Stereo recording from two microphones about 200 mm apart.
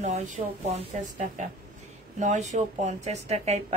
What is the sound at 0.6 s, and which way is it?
A woman's voice, 35° right (ahead or behind).